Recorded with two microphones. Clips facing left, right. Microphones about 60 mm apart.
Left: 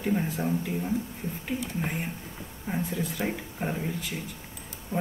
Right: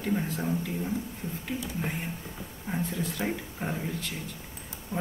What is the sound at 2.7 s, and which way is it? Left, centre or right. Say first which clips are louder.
Speech: left 1 dB; centre.